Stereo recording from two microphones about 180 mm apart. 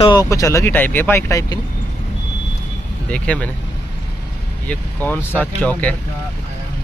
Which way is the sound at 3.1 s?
5° left (ahead or behind).